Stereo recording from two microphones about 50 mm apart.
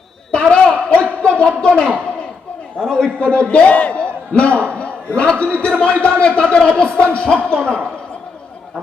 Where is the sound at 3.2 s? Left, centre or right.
Left.